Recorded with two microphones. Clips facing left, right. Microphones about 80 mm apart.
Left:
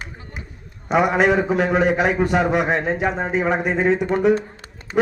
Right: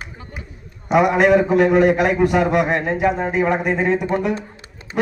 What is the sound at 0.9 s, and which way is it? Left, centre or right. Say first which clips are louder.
A man's voice: right 3 dB; centre.